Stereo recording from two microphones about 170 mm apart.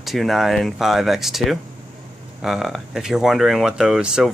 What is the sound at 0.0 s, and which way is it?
Speech, centre (ahead or behind).